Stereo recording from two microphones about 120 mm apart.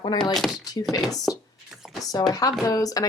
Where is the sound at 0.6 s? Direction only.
30° left (ahead or behind).